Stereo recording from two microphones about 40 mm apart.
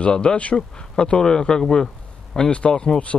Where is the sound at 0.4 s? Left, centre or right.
Left.